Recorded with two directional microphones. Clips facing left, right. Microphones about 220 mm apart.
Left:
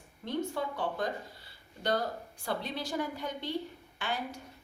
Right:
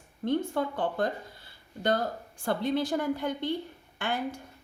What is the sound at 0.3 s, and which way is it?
Speech, 55° right (ahead or behind).